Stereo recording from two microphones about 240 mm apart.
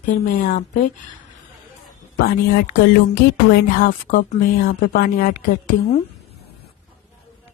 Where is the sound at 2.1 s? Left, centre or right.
Left.